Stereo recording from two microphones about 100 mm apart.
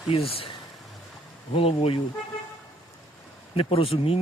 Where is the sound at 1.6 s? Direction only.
70° left (ahead or behind).